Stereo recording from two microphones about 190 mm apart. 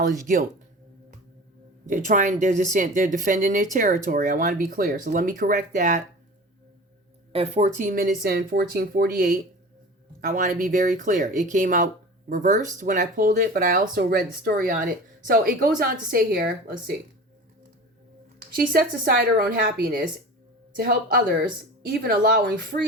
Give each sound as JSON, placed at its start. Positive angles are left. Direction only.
{"t": 1.9, "sound": "speech", "side_deg": -40}
{"t": 7.3, "sound": "speech", "side_deg": -35}
{"t": 18.7, "sound": "speech", "side_deg": -50}